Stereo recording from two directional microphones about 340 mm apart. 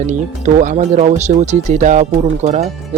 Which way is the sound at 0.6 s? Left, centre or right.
Right.